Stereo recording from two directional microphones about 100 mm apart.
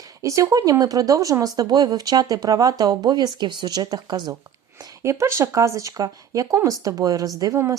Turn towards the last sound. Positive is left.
turn(degrees=-35)  # may be behind; listen again after turning